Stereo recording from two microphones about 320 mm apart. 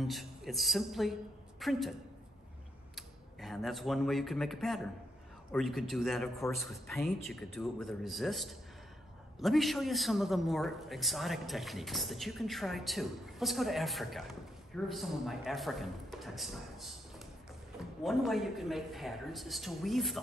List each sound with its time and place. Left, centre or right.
0.0 s a man's voice: centre
3.0 s a man's voice: centre